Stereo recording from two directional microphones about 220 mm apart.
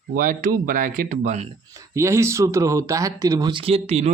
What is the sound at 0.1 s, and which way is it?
Speech, 40° right (ahead or behind).